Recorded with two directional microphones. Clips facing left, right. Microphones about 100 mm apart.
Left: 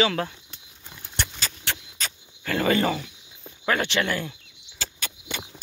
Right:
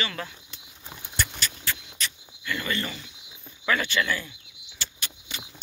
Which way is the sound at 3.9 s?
60° left (ahead or behind).